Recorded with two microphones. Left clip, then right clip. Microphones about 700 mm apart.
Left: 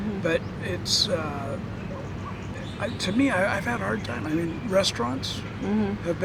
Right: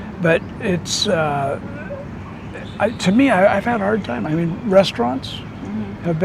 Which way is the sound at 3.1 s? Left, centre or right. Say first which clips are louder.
Right 9 dB; right.